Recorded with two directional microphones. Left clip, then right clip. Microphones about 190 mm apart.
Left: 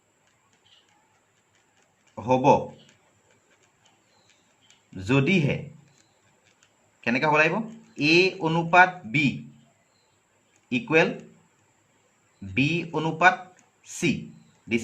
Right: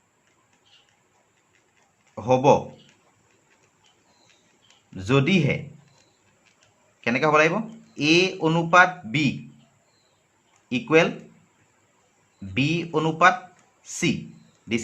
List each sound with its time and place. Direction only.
2.1 s speech: 25° right (ahead or behind)
4.9 s speech: 25° right (ahead or behind)
7.0 s speech: 25° right (ahead or behind)
10.7 s speech: 25° right (ahead or behind)
12.5 s speech: 25° right (ahead or behind)